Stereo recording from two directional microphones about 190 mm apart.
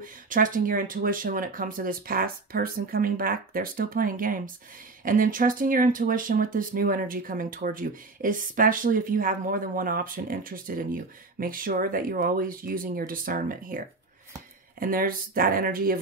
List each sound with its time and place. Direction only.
0.0 s speech: 45° right (ahead or behind)